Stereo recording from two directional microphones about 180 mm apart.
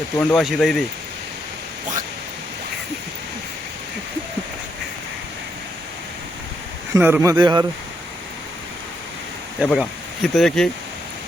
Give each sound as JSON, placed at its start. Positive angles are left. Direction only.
{"t": 0.2, "sound": "speech", "side_deg": 0}
{"t": 6.9, "sound": "speech", "side_deg": -15}
{"t": 9.6, "sound": "speech", "side_deg": -5}